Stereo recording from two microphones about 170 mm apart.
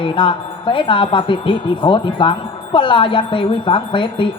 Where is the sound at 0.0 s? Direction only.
30° left (ahead or behind).